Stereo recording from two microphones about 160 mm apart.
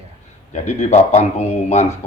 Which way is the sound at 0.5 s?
45° left (ahead or behind).